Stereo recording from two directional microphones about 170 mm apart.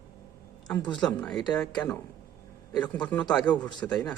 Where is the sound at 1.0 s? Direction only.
5° left (ahead or behind).